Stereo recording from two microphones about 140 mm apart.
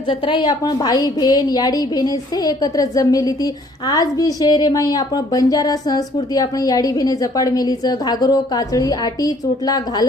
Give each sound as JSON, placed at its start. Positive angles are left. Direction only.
{"t": 0.1, "sound": "a woman's voice", "side_deg": 35}